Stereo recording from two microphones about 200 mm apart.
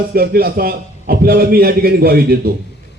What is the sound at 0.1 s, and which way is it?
A man's voice, 50° right (ahead or behind).